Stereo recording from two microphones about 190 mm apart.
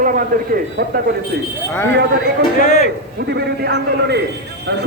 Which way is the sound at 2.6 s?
40° left (ahead or behind).